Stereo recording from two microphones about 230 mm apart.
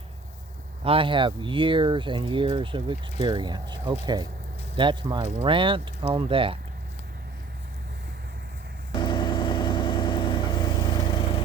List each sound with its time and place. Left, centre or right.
0.9 s speech: right
8.9 s vehicle: centre